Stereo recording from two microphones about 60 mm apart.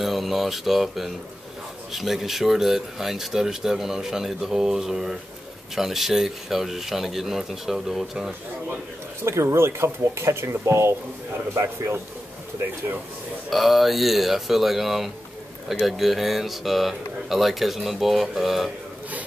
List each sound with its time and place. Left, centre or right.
0.0 s speech: centre
9.2 s speech: right
13.5 s speech: centre